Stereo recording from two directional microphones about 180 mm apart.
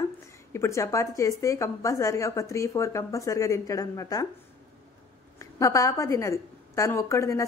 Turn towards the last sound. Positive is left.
turn(degrees=15)  # may be behind; listen again after turning